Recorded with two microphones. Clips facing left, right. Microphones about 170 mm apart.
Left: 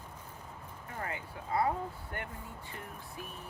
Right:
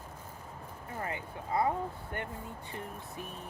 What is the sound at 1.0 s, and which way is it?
Speech, 25° right (ahead or behind).